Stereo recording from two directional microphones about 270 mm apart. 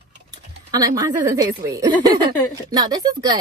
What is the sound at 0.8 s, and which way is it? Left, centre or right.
Speech, centre.